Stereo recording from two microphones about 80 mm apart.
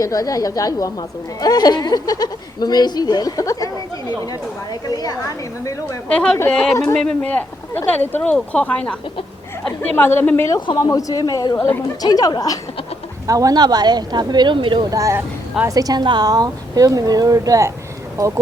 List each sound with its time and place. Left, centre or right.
0.0 s a woman's voice: left
4.3 s a woman's voice: left
6.1 s speech: centre
7.2 s speech: centre
9.9 s a woman's voice: left
10.8 s a woman's voice: left
13.2 s speech: right
14.8 s a woman's voice: right